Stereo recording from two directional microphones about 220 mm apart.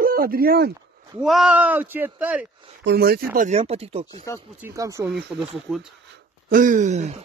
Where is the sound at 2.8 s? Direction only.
45° right (ahead or behind).